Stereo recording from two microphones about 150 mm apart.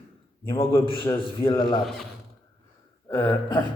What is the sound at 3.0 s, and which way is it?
Speech, 20° left (ahead or behind).